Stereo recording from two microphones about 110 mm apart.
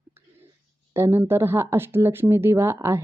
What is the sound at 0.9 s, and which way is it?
A woman's voice, 20° right (ahead or behind).